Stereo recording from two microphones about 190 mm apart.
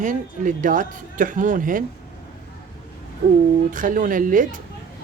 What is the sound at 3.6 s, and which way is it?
Speech, 45° right (ahead or behind).